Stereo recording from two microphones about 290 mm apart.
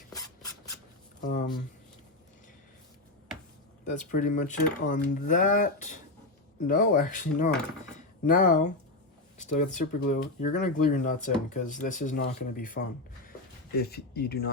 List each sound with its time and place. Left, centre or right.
3.8 s speech: left